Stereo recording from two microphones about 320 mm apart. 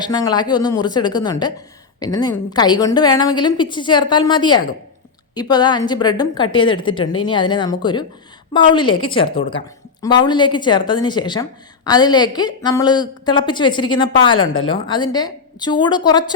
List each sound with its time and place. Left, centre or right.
0.0 s a woman's voice: centre